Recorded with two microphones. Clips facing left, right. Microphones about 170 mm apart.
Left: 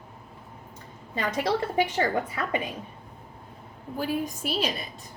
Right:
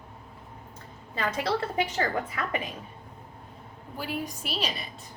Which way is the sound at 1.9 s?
30° left (ahead or behind).